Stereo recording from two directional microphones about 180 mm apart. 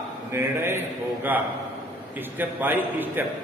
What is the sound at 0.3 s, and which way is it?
A man's voice, 15° right (ahead or behind).